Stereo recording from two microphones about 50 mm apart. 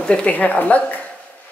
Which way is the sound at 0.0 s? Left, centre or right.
Left.